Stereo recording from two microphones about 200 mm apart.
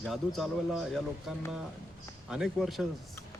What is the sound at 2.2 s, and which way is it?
Speech, centre (ahead or behind).